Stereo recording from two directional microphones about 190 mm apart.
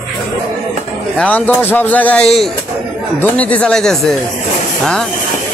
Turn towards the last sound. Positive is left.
turn(degrees=5)  # may be behind; listen again after turning